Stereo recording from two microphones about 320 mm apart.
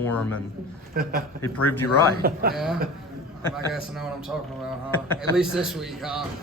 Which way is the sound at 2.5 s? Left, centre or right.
Centre.